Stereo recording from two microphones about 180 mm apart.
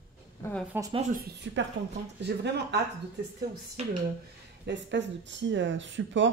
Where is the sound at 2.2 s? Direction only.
70° right (ahead or behind).